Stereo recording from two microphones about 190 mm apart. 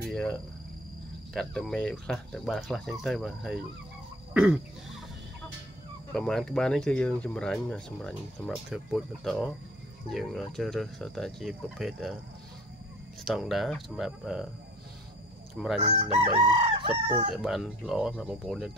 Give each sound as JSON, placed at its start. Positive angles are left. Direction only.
{"t": 0.0, "sound": "cricket", "side_deg": 0}
{"t": 1.3, "sound": "speech", "side_deg": 0}
{"t": 4.3, "sound": "throat clearing", "side_deg": -5}
{"t": 6.1, "sound": "speech", "side_deg": 0}
{"t": 13.2, "sound": "speech", "side_deg": 0}
{"t": 15.8, "sound": "chicken", "side_deg": -30}
{"t": 17.3, "sound": "speech", "side_deg": 0}